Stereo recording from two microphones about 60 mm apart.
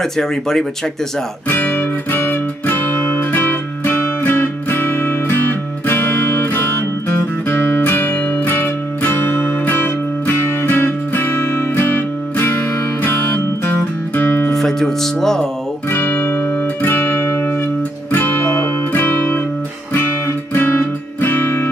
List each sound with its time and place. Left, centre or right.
0.0 s speech: centre
1.7 s music: left
13.0 s music: left
14.5 s music: centre
15.9 s music: left